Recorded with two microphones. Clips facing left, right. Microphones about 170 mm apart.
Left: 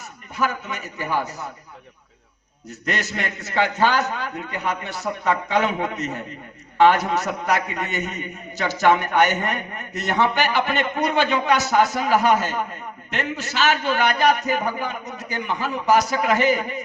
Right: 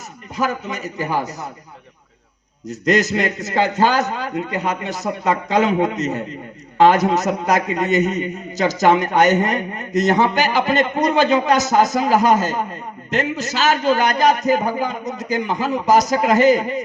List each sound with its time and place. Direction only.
0.3 s a man's voice: 40° right (ahead or behind)
2.8 s a man's voice: 40° right (ahead or behind)